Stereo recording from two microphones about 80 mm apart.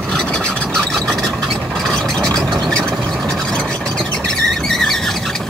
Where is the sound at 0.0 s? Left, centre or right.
Centre.